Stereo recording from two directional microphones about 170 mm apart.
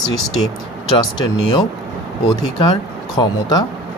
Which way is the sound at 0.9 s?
25° left (ahead or behind).